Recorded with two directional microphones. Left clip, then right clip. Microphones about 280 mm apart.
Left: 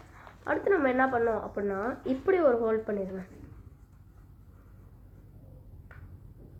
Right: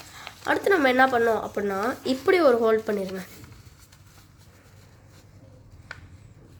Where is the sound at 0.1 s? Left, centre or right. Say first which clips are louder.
Right 6 dB; right.